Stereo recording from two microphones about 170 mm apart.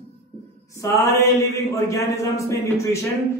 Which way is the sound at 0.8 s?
15° left (ahead or behind).